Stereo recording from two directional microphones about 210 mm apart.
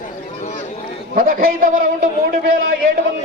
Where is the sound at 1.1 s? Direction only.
40° right (ahead or behind).